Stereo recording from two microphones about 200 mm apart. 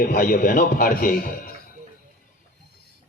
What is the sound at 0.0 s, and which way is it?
A man's voice, 45° left (ahead or behind).